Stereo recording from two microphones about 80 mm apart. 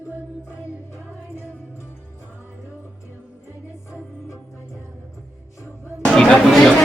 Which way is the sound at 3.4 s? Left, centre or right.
Left.